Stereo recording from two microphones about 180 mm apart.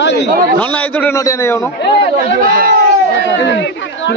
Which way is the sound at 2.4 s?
50° right (ahead or behind).